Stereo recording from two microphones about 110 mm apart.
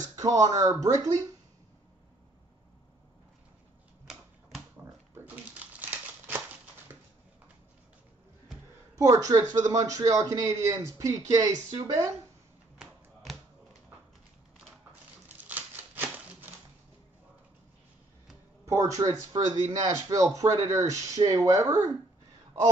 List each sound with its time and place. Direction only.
0.1 s a man's voice: 35° right (ahead or behind)
5.1 s a sound: 15° right (ahead or behind)
8.9 s a man's voice: 30° right (ahead or behind)
12.7 s typewriter: centre (ahead or behind)
15.2 s a sound: 15° right (ahead or behind)
18.7 s a man's voice: 30° right (ahead or behind)